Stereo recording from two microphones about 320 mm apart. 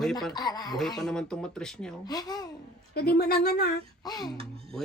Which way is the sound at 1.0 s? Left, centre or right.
Centre.